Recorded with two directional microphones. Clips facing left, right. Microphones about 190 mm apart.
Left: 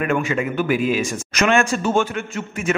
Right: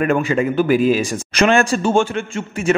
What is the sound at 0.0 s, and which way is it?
Speech, 35° right (ahead or behind).